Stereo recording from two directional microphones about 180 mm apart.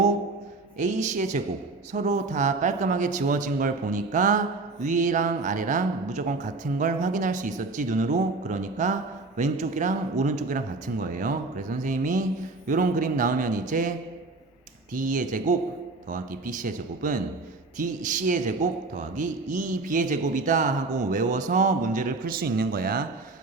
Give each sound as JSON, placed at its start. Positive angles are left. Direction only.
{"t": 0.8, "sound": "a man's voice", "side_deg": -40}
{"t": 14.9, "sound": "a man's voice", "side_deg": -45}